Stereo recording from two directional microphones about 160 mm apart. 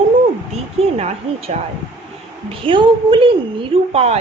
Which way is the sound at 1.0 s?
45° right (ahead or behind).